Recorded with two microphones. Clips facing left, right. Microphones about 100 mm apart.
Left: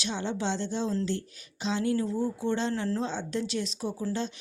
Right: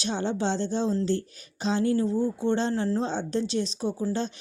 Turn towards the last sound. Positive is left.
turn(degrees=-25)  # may be behind; listen again after turning